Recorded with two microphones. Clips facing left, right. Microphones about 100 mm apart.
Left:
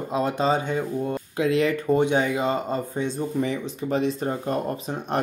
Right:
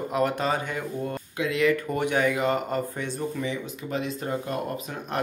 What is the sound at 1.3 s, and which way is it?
Speech, 35° left (ahead or behind).